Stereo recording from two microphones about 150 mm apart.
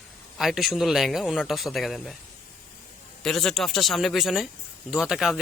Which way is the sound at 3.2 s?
Centre (ahead or behind).